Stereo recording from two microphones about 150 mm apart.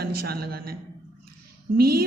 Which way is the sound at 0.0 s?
90° right.